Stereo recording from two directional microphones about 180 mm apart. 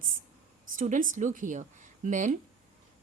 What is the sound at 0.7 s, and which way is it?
Speech, 45° right (ahead or behind).